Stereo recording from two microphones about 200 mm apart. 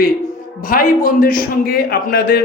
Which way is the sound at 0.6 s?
45° left (ahead or behind).